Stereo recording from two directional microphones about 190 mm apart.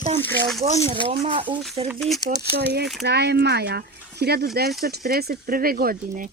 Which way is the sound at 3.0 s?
60° right (ahead or behind).